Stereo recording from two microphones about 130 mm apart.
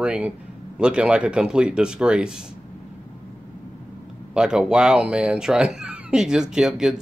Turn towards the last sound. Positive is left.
turn(degrees=-5)  # may be behind; listen again after turning